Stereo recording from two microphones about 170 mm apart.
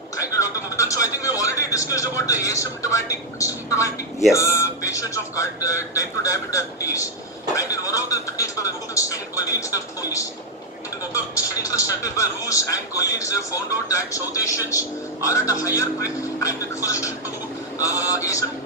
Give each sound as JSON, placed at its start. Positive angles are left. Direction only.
{"t": 0.2, "sound": "a man's voice", "side_deg": 20}